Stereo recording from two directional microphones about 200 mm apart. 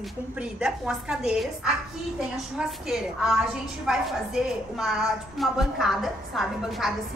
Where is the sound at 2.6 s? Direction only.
5° right (ahead or behind).